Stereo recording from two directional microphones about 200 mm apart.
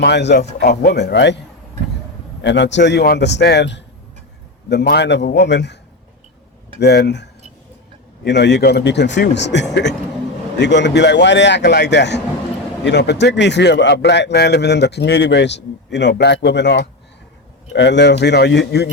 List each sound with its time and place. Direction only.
0.0 s a man's voice: 60° left (ahead or behind)
2.4 s a man's voice: 60° left (ahead or behind)
6.7 s a man's voice: 55° left (ahead or behind)